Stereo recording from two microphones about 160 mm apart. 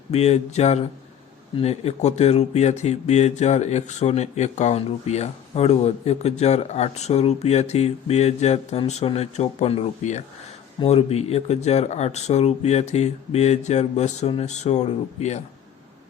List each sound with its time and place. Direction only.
0.1 s speech: 40° left (ahead or behind)